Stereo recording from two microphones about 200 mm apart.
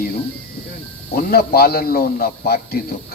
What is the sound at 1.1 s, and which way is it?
A man's voice, 50° left (ahead or behind).